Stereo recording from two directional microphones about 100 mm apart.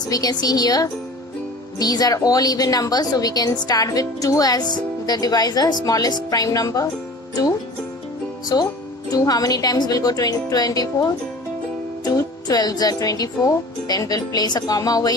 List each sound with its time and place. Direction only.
0.1 s speech: 40° left (ahead or behind)
8.5 s speech: 40° left (ahead or behind)